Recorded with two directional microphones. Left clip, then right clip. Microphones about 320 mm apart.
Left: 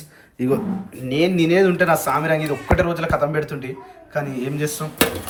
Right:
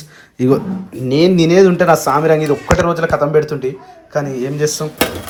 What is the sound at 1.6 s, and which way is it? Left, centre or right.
Speech, centre.